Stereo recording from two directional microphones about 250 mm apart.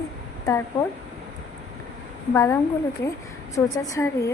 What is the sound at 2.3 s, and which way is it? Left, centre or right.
A woman's voice, centre.